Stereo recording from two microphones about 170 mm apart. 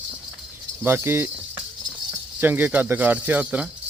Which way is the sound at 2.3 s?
10° right (ahead or behind).